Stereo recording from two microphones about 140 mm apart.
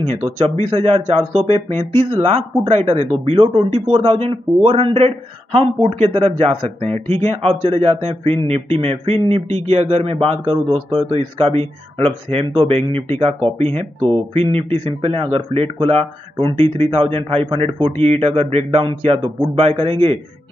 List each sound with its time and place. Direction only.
0.0 s speech: 45° right (ahead or behind)